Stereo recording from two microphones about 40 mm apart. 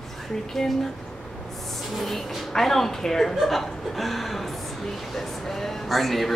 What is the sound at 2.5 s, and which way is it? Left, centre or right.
Speech, centre.